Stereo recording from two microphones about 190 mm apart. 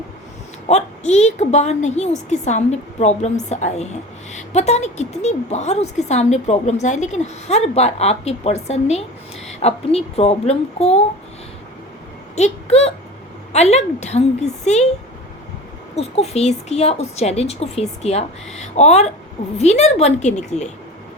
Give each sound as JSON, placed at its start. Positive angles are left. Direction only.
{"t": 0.7, "sound": "a woman's voice", "side_deg": 35}
{"t": 12.4, "sound": "a woman's voice", "side_deg": 35}
{"t": 16.0, "sound": "a woman's voice", "side_deg": 35}